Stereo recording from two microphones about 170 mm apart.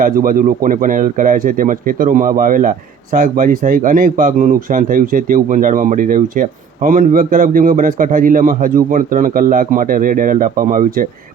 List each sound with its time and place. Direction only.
0.0 s speech: 55° right (ahead or behind)